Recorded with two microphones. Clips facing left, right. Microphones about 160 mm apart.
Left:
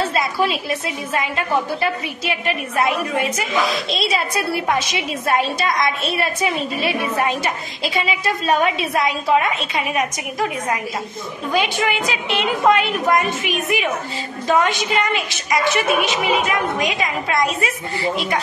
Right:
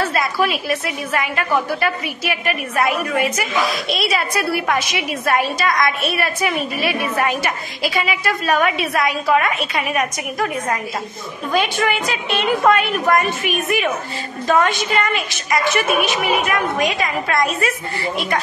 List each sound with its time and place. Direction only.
0.0 s a sound: 20° left (ahead or behind)
0.7 s a woman's voice: 25° left (ahead or behind)
8.5 s a woman's voice: 25° left (ahead or behind)
11.5 s a woman's voice: 15° left (ahead or behind)